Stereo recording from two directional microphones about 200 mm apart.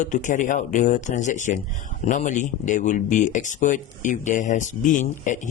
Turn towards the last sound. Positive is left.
turn(degrees=40)  # may be behind; listen again after turning